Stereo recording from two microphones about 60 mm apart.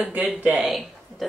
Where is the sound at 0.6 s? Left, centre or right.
Centre.